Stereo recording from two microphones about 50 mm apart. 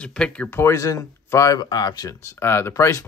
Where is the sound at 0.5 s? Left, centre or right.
Left.